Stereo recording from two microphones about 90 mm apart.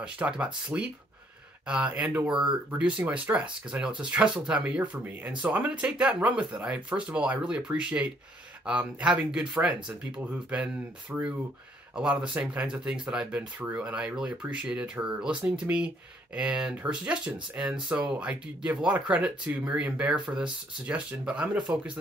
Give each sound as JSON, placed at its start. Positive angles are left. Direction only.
{"t": 0.0, "sound": "speech", "side_deg": -10}